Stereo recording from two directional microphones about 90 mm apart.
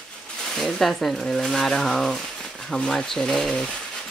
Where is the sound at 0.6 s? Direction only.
5° left (ahead or behind).